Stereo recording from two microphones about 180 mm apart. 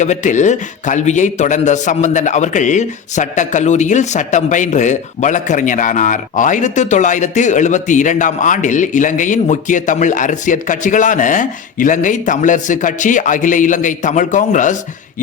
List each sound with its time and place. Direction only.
0.0 s a man's voice: 40° left (ahead or behind)